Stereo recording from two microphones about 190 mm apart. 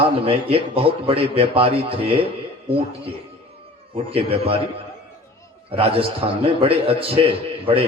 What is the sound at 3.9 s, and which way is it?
Speech, 30° right (ahead or behind).